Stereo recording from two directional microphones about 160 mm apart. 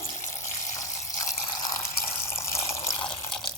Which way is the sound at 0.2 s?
20° left (ahead or behind).